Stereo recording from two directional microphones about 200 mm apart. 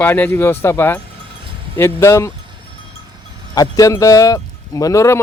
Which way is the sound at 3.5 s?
15° left (ahead or behind).